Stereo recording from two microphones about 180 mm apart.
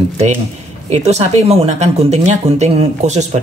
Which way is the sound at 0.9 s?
40° right (ahead or behind).